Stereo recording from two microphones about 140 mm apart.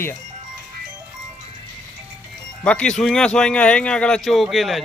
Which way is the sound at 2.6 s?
5° left (ahead or behind).